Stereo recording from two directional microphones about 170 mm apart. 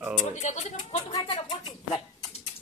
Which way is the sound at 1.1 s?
25° left (ahead or behind).